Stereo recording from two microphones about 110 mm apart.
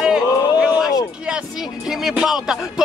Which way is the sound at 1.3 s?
5° right (ahead or behind).